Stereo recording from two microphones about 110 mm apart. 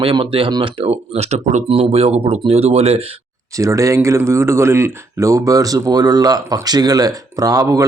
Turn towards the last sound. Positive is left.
turn(degrees=-30)  # may be behind; listen again after turning